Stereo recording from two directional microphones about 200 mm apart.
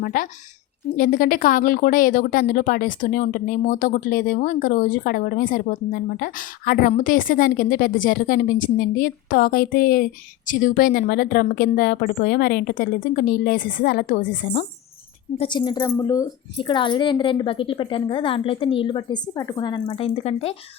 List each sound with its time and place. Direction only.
0.0 s speech: 45° left (ahead or behind)
15.4 s a woman's voice: 25° left (ahead or behind)